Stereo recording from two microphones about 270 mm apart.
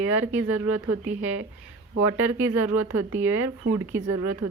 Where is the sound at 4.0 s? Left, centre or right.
Right.